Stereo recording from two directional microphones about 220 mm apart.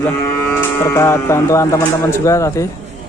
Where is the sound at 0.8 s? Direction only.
10° left (ahead or behind).